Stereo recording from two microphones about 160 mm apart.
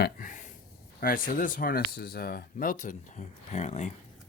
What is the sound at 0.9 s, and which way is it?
Speech, 60° left (ahead or behind).